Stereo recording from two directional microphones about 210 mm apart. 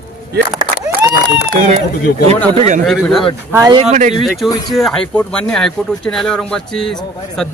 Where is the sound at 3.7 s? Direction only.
35° right (ahead or behind).